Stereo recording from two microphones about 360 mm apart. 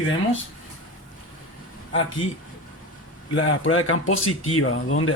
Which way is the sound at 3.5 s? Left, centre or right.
Left.